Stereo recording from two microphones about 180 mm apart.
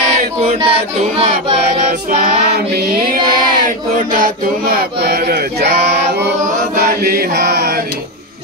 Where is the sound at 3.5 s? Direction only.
50° right (ahead or behind).